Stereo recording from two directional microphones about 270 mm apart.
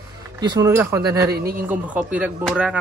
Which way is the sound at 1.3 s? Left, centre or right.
Right.